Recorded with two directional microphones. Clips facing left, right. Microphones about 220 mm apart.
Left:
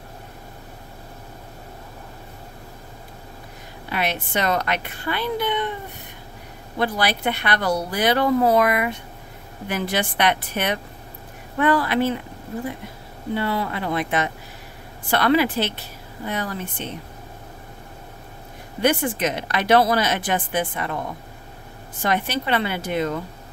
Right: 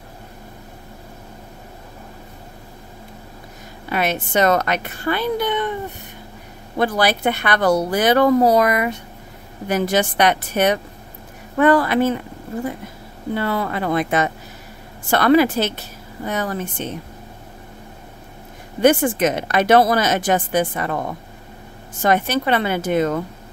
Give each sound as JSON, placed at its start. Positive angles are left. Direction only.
{"t": 3.9, "sound": "speech", "side_deg": -45}
{"t": 6.8, "sound": "speech", "side_deg": -45}
{"t": 13.3, "sound": "speech", "side_deg": -45}
{"t": 18.8, "sound": "speech", "side_deg": -50}
{"t": 22.0, "sound": "speech", "side_deg": -45}